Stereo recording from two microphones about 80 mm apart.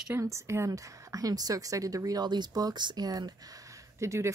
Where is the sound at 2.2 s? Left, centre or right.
Right.